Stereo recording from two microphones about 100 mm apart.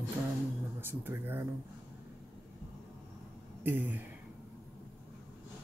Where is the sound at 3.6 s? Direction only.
20° right (ahead or behind).